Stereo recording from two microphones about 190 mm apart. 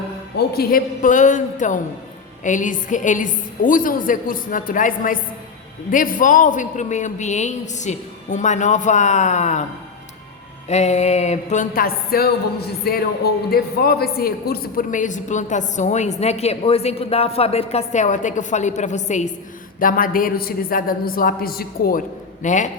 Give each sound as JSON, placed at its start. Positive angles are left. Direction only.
{"t": 0.3, "sound": "a man's voice", "side_deg": 55}
{"t": 10.7, "sound": "a man's voice", "side_deg": 35}
{"t": 22.4, "sound": "a man's voice", "side_deg": 40}